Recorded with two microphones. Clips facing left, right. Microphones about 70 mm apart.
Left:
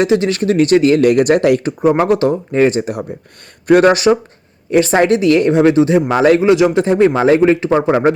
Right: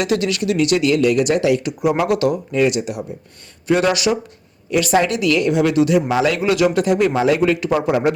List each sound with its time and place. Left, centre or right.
0.0 s speech: left
3.7 s speech: left
3.9 s speech: left